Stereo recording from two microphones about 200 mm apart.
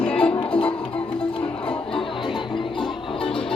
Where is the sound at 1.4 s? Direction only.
5° left (ahead or behind).